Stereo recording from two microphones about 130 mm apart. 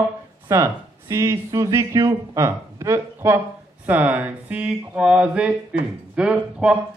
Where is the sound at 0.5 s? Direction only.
25° right (ahead or behind).